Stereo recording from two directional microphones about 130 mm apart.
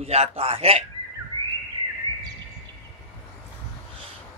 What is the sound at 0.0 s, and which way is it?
Speech, 50° right (ahead or behind).